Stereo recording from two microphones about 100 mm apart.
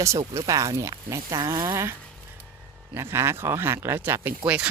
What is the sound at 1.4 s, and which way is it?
Speech, 45° right (ahead or behind).